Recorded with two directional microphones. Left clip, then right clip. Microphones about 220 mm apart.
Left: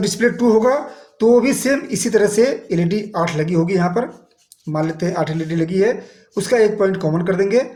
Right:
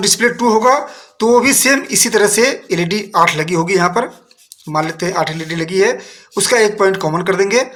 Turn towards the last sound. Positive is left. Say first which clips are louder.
# right 3 dB
turn(degrees=-20)  # may be behind; listen again after turning